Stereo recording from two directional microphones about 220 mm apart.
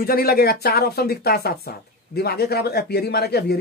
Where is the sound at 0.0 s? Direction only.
45° left (ahead or behind).